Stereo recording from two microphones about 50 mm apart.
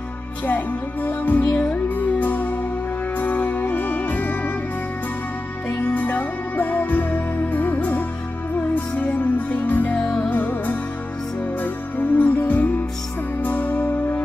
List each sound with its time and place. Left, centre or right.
1.0 s music: left
1.5 s music: left
5.9 s music: left
9.9 s music: left
10.3 s music: left